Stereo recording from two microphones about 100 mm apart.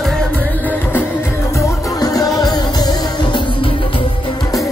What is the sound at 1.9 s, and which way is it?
Music, 40° left (ahead or behind).